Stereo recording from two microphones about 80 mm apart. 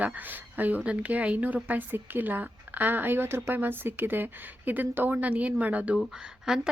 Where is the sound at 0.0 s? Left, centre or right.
Right.